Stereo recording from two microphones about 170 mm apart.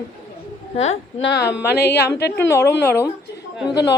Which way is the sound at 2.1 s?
85° left.